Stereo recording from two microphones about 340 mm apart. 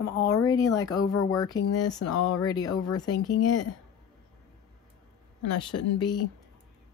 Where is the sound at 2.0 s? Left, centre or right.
Left.